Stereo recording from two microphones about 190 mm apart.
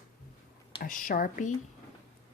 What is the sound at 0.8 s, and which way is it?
Speech, 45° left (ahead or behind).